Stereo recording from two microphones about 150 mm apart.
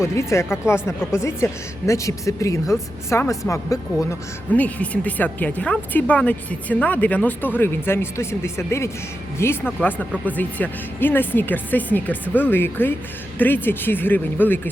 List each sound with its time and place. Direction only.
0.0 s a woman's voice: 20° left (ahead or behind)